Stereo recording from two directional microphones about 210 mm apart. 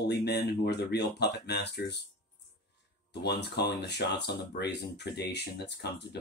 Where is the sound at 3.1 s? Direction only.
55° left (ahead or behind).